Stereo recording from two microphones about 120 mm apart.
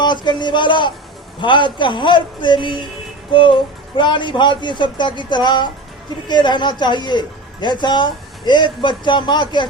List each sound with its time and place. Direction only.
0.0 s a man's voice: 40° left (ahead or behind)